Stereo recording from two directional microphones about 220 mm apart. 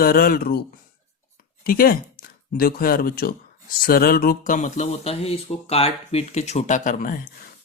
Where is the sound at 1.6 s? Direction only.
40° left (ahead or behind).